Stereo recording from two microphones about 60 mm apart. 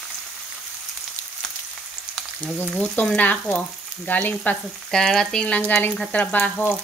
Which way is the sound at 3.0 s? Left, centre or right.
Left.